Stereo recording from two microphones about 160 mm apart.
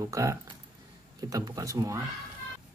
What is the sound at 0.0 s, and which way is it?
Speech, 20° right (ahead or behind).